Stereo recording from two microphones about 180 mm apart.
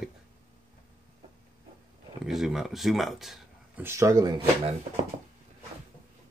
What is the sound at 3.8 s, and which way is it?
Speech, 15° right (ahead or behind).